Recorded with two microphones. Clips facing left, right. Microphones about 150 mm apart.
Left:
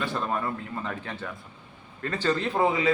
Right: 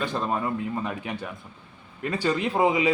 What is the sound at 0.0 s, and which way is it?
A man's voice, 20° right (ahead or behind).